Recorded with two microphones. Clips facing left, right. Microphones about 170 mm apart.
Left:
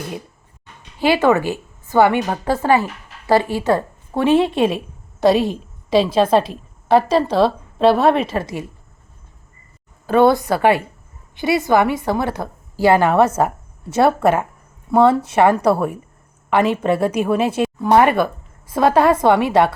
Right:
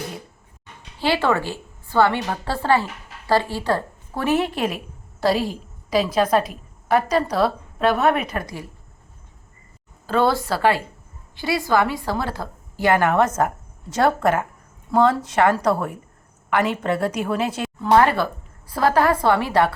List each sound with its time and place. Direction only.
0.9 s a woman's voice: 15° left (ahead or behind)
10.1 s a woman's voice: 20° left (ahead or behind)